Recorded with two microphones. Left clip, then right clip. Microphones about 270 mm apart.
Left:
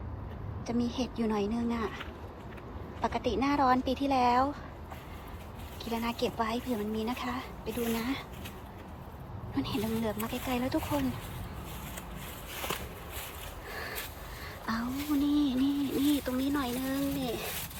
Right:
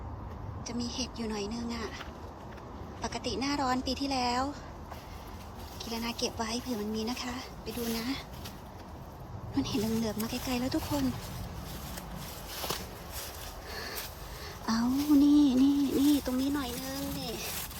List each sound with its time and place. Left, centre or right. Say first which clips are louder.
0.6 s speech: left 3 dB; centre
5.8 s speech: left 2 dB; centre
9.6 s speech: right 1 dB; centre
14.7 s a sound: right 5 dB; centre
16.3 s speech: left 1 dB; centre
17.2 s a sound: left 3 dB; centre